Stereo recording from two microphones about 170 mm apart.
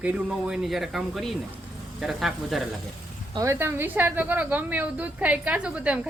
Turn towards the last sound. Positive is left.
turn(degrees=-5)  # may be behind; listen again after turning